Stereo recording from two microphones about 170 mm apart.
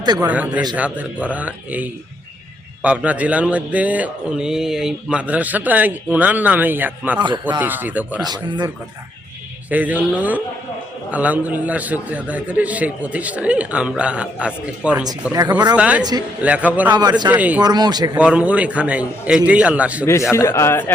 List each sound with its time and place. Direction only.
0.0 s a man's voice: 25° right (ahead or behind)
0.3 s speech: 10° right (ahead or behind)
7.2 s speech: 25° right (ahead or behind)
7.6 s speech: 10° right (ahead or behind)
8.2 s speech: 25° right (ahead or behind)
9.6 s speech: 10° right (ahead or behind)
15.3 s speech: 20° right (ahead or behind)
15.7 s speech: 5° right (ahead or behind)
16.9 s speech: 25° right (ahead or behind)
17.2 s speech: 10° right (ahead or behind)
17.6 s speech: 25° right (ahead or behind)
18.2 s speech: 5° right (ahead or behind)
20.3 s a man's voice: 15° left (ahead or behind)